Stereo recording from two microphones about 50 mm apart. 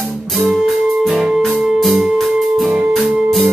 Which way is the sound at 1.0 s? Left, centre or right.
Centre.